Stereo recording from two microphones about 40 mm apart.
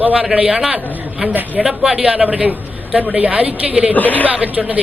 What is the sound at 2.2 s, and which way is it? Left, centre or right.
A man's voice, right.